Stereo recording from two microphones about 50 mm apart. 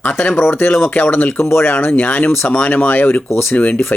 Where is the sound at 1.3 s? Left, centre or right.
Left.